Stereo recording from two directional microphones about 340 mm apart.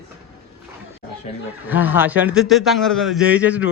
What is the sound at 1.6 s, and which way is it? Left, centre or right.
A man's voice, centre.